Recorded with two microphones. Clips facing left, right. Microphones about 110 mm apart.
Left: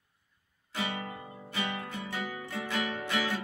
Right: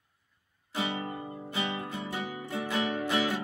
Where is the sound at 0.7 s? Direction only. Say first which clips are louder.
Right 3 dB; 25° right (ahead or behind).